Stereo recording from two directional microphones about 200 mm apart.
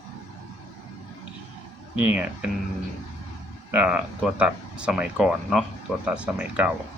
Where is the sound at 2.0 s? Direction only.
10° right (ahead or behind).